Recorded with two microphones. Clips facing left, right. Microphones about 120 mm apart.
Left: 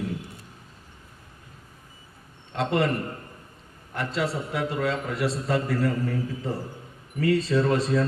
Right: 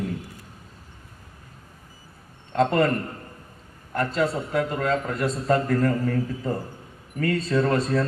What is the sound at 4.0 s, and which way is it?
A man's voice, 45° right (ahead or behind).